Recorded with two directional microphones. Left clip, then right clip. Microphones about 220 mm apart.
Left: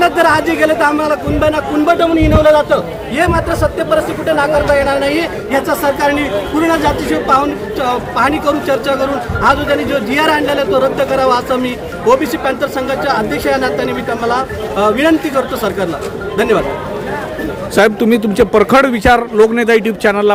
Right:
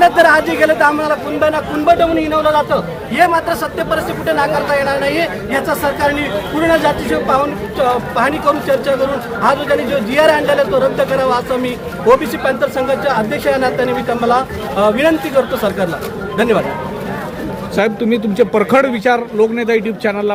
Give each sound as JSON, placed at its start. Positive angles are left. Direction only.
{"t": 0.0, "sound": "speech", "side_deg": 0}
{"t": 3.2, "sound": "a man's voice", "side_deg": -15}
{"t": 17.7, "sound": "a man's voice", "side_deg": 25}